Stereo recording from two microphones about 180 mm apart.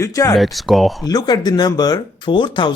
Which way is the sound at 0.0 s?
20° left (ahead or behind).